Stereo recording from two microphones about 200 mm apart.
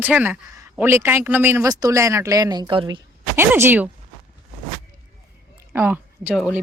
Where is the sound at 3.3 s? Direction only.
10° right (ahead or behind).